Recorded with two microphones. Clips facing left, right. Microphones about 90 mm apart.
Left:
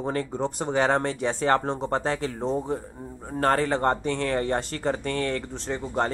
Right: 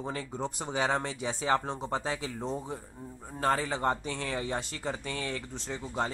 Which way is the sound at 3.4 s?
60° left (ahead or behind).